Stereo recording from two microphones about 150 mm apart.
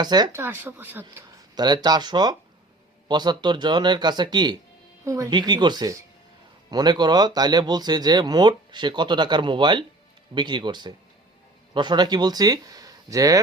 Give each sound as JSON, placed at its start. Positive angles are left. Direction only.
{"t": 0.0, "sound": "speech", "side_deg": -30}
{"t": 0.3, "sound": "speech", "side_deg": -15}
{"t": 1.5, "sound": "speech", "side_deg": -30}